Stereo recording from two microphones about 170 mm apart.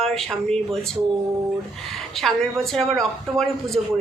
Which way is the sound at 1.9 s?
Centre (ahead or behind).